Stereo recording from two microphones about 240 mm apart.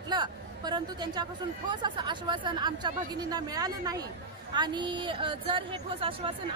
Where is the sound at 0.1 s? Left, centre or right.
Centre.